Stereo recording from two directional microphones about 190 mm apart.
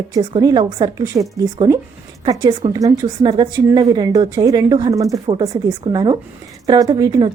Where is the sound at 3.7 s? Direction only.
20° right (ahead or behind).